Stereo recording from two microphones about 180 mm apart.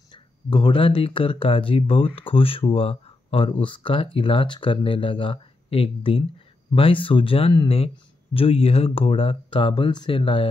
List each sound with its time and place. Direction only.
0.1 s speech: 25° left (ahead or behind)